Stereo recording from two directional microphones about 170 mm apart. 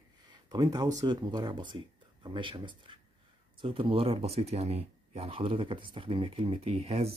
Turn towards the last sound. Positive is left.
turn(degrees=-35)  # may be behind; listen again after turning